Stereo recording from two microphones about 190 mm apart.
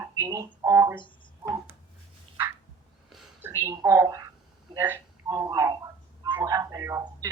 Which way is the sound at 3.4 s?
15° right (ahead or behind).